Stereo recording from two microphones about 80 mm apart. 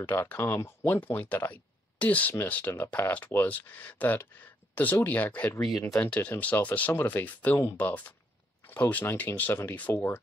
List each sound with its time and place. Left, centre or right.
0.0 s speech: left
1.0 s speech: left
5.6 s speech: centre
5.9 s speech: centre